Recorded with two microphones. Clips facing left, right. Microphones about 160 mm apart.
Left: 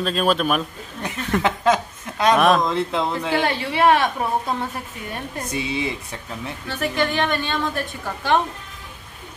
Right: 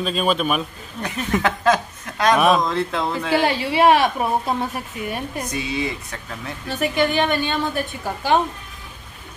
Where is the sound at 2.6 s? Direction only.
20° left (ahead or behind).